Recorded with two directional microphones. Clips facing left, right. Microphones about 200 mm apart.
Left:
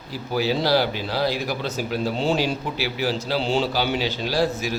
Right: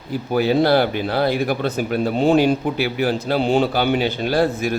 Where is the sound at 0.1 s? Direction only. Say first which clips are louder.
Right 5 dB; 55° right (ahead or behind).